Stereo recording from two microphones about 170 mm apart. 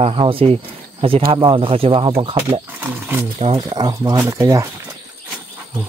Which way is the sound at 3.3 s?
35° right (ahead or behind).